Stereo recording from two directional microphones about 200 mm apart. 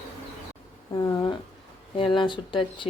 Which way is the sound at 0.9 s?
20° left (ahead or behind).